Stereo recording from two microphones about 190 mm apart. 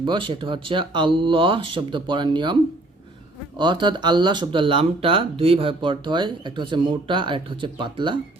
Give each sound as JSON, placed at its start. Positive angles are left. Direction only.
{"t": 0.0, "sound": "speech", "side_deg": -25}
{"t": 3.6, "sound": "speech", "side_deg": -25}